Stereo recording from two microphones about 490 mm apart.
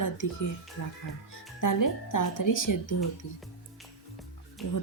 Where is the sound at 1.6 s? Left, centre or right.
Left.